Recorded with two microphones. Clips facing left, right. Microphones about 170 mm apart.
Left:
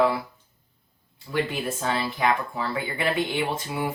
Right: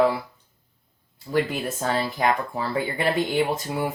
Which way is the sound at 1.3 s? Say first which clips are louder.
Right 3 dB; 40° right (ahead or behind).